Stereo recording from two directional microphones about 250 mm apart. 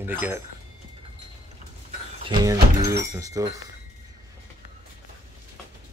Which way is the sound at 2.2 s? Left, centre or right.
Centre.